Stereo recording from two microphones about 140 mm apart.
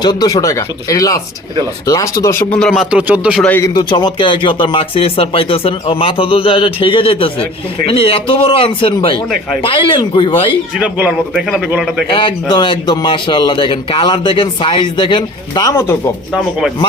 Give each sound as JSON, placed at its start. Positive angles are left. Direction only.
{"t": 0.0, "sound": "speech", "side_deg": 30}
{"t": 2.5, "sound": "speech", "side_deg": 5}
{"t": 2.9, "sound": "speech", "side_deg": -10}
{"t": 3.6, "sound": "speech", "side_deg": 30}
{"t": 10.8, "sound": "speech", "side_deg": -10}
{"t": 12.0, "sound": "speech", "side_deg": 35}
{"t": 15.7, "sound": "speech", "side_deg": 20}